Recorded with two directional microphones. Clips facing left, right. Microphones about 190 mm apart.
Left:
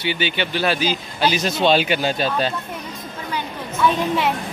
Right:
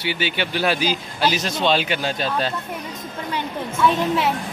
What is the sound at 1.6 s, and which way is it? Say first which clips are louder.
Speech: left 4 dB; 10° left (ahead or behind).